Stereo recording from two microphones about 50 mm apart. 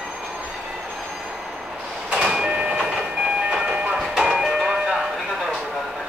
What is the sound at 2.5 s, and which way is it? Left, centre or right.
Train, right.